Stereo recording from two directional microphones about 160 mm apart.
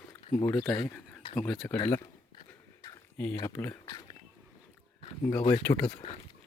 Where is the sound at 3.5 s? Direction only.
15° left (ahead or behind).